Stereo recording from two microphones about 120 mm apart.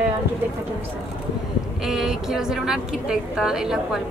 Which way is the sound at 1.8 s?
5° right (ahead or behind).